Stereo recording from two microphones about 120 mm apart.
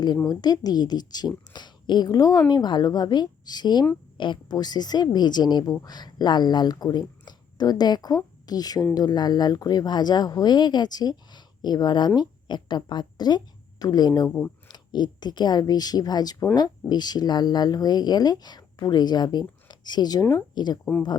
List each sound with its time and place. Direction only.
0.3 s a woman's voice: 30° left (ahead or behind)